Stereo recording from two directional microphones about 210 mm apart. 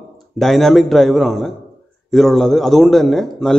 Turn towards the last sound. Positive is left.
turn(degrees=0)  # may be behind; listen again after turning